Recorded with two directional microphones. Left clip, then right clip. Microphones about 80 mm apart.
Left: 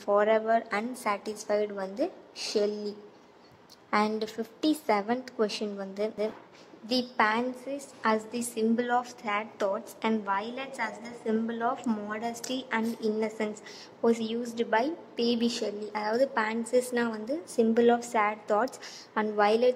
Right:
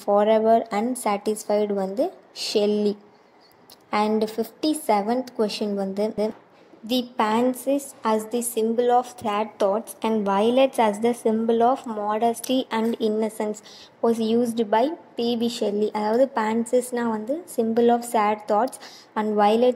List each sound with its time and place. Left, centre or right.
0.0 s a woman's voice: right
4.2 s a woman's voice: right
10.2 s a woman's voice: right
11.2 s a woman's voice: right
14.0 s a woman's voice: right